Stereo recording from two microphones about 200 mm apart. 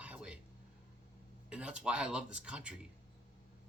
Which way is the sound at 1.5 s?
5° right (ahead or behind).